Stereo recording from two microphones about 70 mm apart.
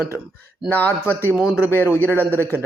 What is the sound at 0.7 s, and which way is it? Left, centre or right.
Speech, left.